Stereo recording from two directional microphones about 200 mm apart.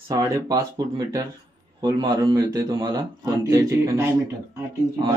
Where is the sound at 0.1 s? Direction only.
15° right (ahead or behind).